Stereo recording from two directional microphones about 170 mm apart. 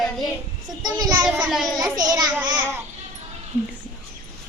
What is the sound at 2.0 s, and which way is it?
Speech, 25° right (ahead or behind).